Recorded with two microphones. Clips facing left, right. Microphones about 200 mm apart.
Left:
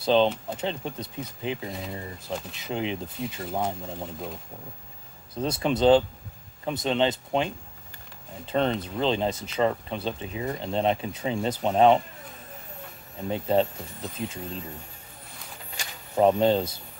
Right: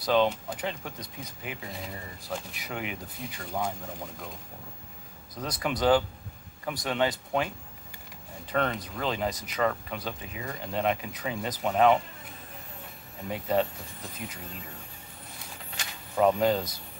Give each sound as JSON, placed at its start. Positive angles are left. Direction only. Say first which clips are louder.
{"t": 0.0, "sound": "speech", "louder": "left 3 dB", "side_deg": 30}
{"t": 5.3, "sound": "speech", "louder": "left 6 dB", "side_deg": 25}
{"t": 13.3, "sound": "speech", "louder": "left 4 dB", "side_deg": 30}
{"t": 16.2, "sound": "speech", "louder": "left 3 dB", "side_deg": 30}